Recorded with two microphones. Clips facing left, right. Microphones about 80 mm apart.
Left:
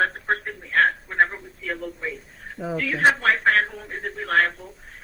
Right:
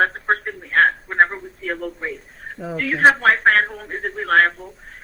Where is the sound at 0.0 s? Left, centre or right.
Right.